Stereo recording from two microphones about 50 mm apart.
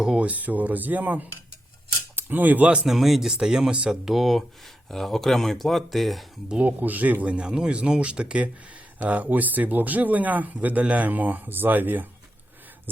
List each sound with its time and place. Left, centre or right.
0.0 s speech: centre
0.3 s speech: right
2.8 s speech: centre
6.6 s speech: right